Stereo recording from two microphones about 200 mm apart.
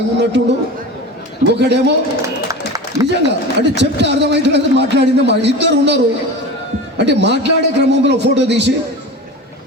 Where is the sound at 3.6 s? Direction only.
60° right (ahead or behind).